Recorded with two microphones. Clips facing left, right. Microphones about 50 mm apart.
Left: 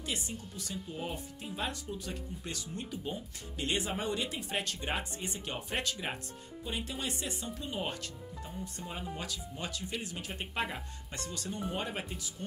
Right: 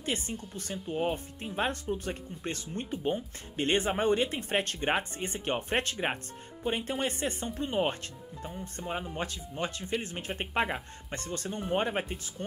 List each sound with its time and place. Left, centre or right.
0.0 s speech: right